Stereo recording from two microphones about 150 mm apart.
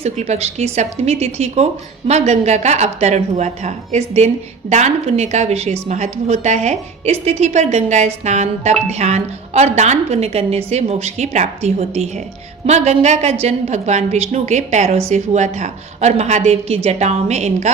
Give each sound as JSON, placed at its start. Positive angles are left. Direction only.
{"t": 0.0, "sound": "a woman's voice", "side_deg": -45}